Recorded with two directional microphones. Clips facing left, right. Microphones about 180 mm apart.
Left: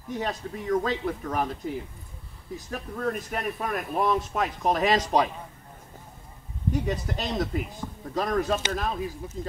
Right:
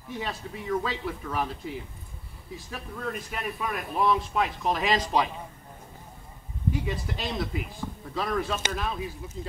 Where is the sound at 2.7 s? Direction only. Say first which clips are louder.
Left 5 dB; 45° left (ahead or behind).